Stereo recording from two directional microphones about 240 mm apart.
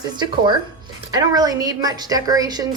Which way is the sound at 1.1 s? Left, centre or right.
Centre.